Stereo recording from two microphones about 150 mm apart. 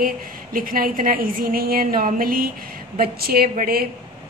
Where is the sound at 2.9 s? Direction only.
85° right.